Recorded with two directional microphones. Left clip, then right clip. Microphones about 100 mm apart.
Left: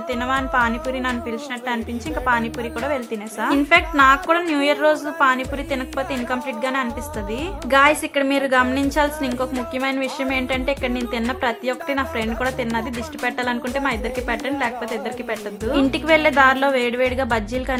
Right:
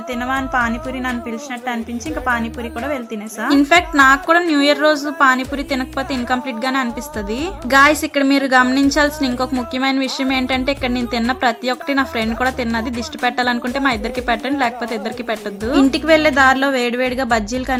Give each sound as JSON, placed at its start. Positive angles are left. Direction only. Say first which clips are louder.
{"t": 0.1, "sound": "a woman's voice", "louder": "right 1 dB", "side_deg": -10}
{"t": 2.2, "sound": "a woman's voice", "louder": "even", "side_deg": -10}
{"t": 3.5, "sound": "a woman's voice", "louder": "right 4 dB", "side_deg": -35}